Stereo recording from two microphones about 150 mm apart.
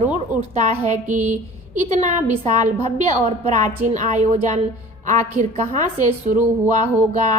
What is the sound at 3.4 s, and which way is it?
A woman's voice, 55° right (ahead or behind).